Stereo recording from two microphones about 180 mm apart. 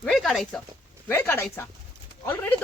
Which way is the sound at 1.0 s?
10° left (ahead or behind).